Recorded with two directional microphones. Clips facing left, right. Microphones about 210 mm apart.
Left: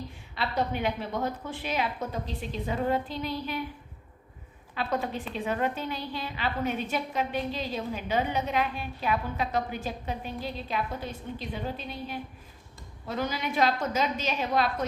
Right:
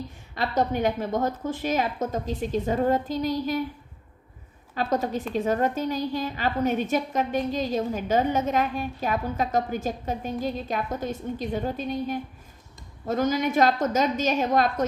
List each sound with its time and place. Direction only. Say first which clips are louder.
0.3 s a woman's voice: right 5 dB; 45° right (ahead or behind)
4.7 s a woman's voice: right 5 dB; 40° right (ahead or behind)